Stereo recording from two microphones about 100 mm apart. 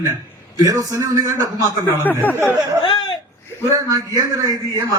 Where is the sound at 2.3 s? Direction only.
20° right (ahead or behind).